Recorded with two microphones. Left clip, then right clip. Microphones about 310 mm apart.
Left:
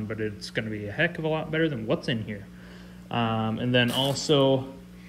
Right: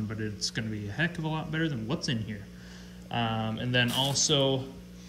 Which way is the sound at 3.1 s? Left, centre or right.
Left.